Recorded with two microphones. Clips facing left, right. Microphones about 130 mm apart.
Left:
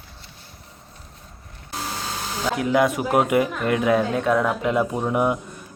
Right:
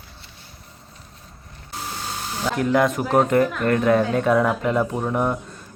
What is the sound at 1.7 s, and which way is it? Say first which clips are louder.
Electric toothbrush: left 1 dB; 90° left.